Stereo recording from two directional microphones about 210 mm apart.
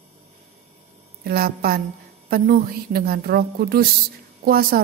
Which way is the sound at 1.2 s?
45° right (ahead or behind).